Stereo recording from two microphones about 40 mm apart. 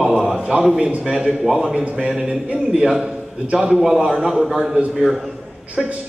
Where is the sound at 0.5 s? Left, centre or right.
Right.